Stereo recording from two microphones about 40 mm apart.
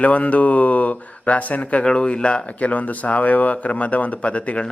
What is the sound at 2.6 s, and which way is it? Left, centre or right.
A man's voice, left.